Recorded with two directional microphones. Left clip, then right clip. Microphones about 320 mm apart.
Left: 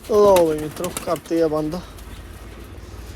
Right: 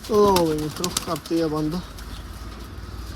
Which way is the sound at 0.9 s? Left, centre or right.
Centre.